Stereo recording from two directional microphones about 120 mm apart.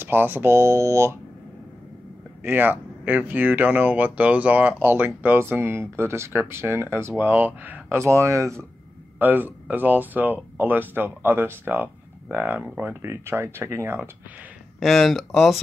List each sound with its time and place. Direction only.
0.0 s speech: 15° right (ahead or behind)
2.4 s speech: 15° right (ahead or behind)
14.8 s speech: centre (ahead or behind)